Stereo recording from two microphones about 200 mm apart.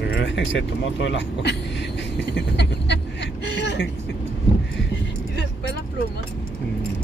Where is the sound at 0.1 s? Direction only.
60° left (ahead or behind).